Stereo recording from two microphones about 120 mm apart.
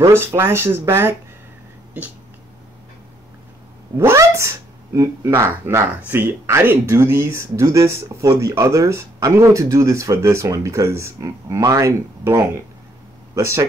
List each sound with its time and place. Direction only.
0.4 s speech: 20° right (ahead or behind)
3.9 s speech: 20° right (ahead or behind)